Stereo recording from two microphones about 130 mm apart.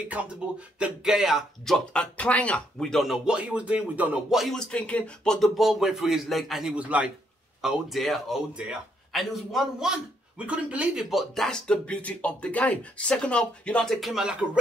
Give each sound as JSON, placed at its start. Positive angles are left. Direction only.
{"t": 0.2, "sound": "a sound", "side_deg": -10}
{"t": 0.7, "sound": "speech", "side_deg": -5}
{"t": 7.6, "sound": "speech", "side_deg": 0}